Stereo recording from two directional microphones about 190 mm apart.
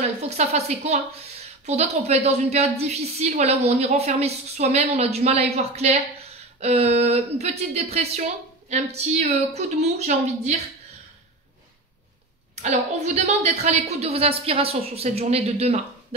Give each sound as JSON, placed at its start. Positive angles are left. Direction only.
{"t": 0.0, "sound": "a woman's voice", "side_deg": -35}
{"t": 12.6, "sound": "a woman's voice", "side_deg": -35}